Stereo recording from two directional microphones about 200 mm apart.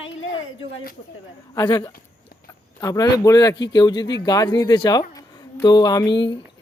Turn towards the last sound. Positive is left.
turn(degrees=20)  # may be behind; listen again after turning